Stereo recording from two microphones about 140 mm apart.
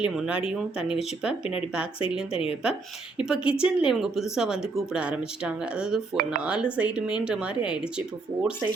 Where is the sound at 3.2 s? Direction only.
5° right (ahead or behind).